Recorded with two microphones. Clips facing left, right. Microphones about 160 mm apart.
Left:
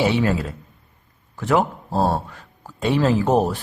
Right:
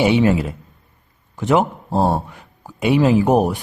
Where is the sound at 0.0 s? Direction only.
20° right (ahead or behind).